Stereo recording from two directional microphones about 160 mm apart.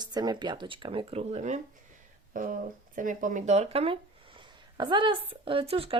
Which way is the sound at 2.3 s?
55° right (ahead or behind).